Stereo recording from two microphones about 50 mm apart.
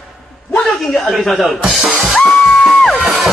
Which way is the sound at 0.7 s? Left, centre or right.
Centre.